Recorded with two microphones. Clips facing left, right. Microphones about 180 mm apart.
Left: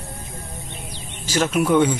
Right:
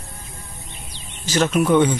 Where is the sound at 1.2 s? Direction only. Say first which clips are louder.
Right 2 dB; 10° left (ahead or behind).